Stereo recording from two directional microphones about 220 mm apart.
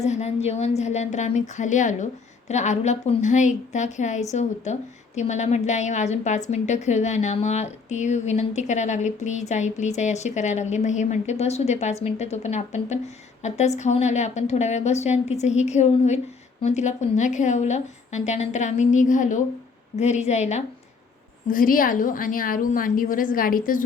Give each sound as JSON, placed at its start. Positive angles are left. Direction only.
{"t": 0.0, "sound": "a woman's voice", "side_deg": 30}